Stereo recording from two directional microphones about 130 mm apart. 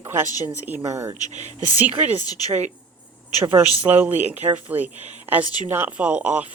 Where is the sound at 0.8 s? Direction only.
25° right (ahead or behind).